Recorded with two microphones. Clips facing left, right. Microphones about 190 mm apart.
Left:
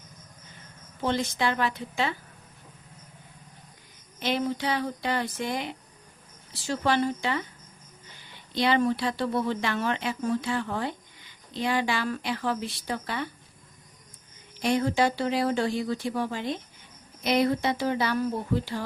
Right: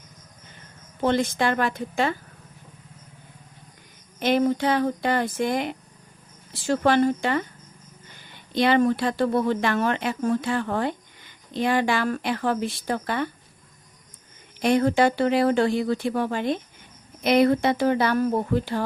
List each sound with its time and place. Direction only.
1.0 s speech: 55° right (ahead or behind)
4.2 s speech: 50° right (ahead or behind)
14.6 s speech: 60° right (ahead or behind)